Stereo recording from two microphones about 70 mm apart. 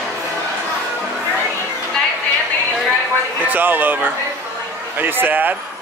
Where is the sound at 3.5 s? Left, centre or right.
Right.